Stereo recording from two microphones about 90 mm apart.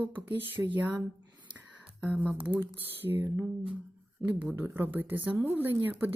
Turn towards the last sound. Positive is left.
turn(degrees=-20)  # may be behind; listen again after turning